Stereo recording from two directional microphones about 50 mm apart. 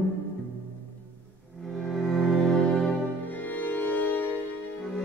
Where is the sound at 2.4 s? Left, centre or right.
Centre.